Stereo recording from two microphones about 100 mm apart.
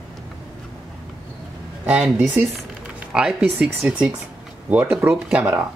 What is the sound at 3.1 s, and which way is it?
Speech, 5° right (ahead or behind).